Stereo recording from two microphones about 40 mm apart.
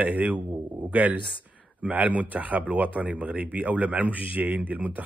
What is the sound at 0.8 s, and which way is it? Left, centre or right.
Speech, right.